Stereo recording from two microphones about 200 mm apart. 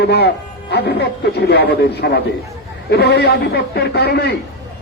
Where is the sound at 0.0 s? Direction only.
55° left (ahead or behind).